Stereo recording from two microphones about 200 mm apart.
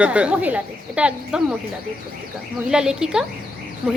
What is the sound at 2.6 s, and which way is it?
Speech, 5° right (ahead or behind).